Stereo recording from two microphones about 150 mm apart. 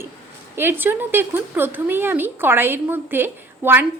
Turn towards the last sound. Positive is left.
turn(degrees=-15)  # may be behind; listen again after turning